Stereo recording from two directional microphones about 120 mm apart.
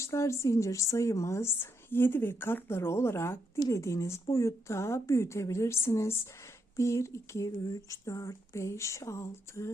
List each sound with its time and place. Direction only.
0.0 s speech: 25° left (ahead or behind)